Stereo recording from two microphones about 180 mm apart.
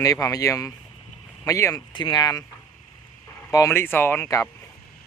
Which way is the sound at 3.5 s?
15° left (ahead or behind).